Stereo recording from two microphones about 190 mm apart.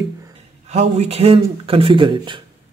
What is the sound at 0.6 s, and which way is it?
Speech, 35° right (ahead or behind).